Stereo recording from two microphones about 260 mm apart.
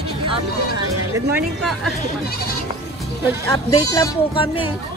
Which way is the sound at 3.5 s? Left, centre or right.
Centre.